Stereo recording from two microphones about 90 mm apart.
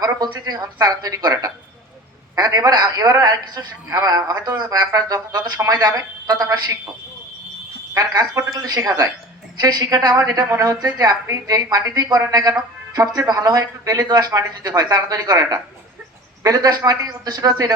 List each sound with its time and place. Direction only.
0.0 s a man's voice: 50° right (ahead or behind)
5.5 s speech: 30° right (ahead or behind)
7.9 s a man's voice: 45° right (ahead or behind)